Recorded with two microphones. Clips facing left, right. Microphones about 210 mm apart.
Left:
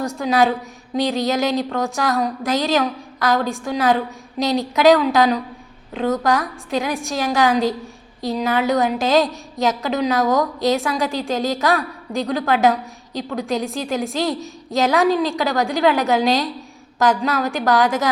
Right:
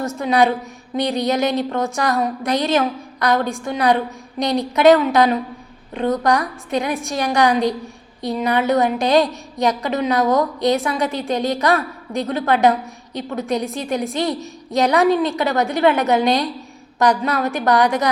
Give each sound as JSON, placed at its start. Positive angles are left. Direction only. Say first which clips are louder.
{"t": 0.0, "sound": "a woman's voice", "louder": "right 1 dB", "side_deg": 0}